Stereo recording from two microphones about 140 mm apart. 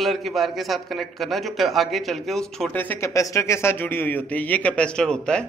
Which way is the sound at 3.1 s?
25° left (ahead or behind).